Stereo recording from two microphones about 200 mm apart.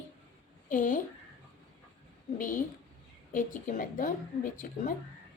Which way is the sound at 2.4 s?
40° left (ahead or behind).